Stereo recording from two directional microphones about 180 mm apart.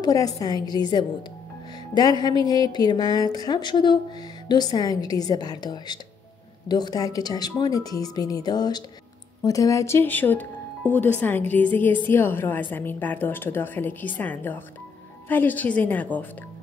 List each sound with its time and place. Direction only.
0.0 s a woman's voice: 20° left (ahead or behind)